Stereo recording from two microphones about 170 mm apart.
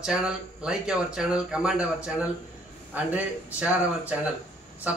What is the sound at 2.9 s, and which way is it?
A man's voice, 10° right (ahead or behind).